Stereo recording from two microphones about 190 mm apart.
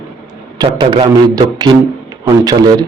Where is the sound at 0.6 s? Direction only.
25° right (ahead or behind).